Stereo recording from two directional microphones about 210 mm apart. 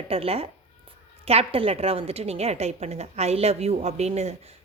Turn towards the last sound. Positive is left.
turn(degrees=-30)  # may be behind; listen again after turning